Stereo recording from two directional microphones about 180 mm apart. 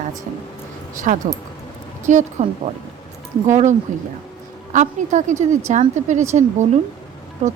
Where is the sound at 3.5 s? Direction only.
40° right (ahead or behind).